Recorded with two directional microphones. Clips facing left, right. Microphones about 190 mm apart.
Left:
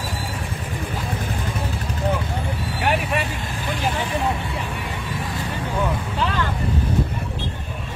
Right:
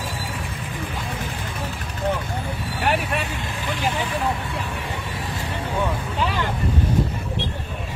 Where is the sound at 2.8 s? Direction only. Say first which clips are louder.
Left 1 dB; centre (ahead or behind).